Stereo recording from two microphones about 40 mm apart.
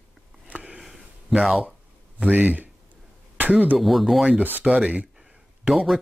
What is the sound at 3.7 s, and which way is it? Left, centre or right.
Speech, centre.